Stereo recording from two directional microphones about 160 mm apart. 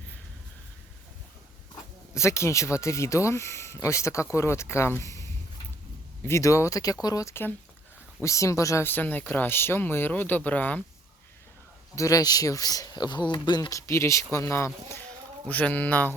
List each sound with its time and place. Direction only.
1.7 s speech: 15° left (ahead or behind)
11.9 s speech: 20° left (ahead or behind)